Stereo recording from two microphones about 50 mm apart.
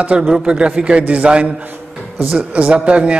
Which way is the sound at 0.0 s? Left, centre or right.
Right.